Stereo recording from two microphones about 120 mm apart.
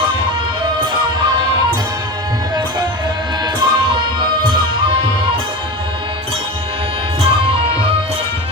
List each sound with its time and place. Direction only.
3.4 s music: 35° right (ahead or behind)
7.2 s music: 50° right (ahead or behind)